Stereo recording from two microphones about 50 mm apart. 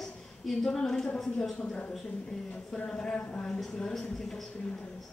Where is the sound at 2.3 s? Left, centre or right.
Centre.